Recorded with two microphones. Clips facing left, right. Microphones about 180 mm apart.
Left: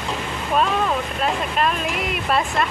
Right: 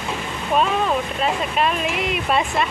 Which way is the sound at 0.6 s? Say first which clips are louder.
Right 1 dB; 5° right (ahead or behind).